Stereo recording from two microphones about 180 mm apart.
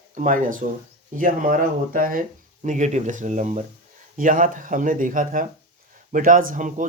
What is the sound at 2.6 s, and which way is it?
Speech, 40° right (ahead or behind).